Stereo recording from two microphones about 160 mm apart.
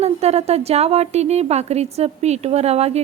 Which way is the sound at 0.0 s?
40° right (ahead or behind).